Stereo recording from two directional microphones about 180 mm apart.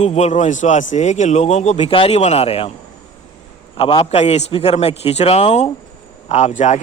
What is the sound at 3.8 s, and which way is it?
A man's voice, 30° left (ahead or behind).